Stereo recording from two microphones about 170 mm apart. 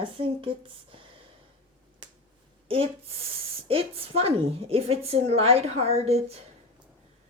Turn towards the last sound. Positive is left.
turn(degrees=-35)  # may be behind; listen again after turning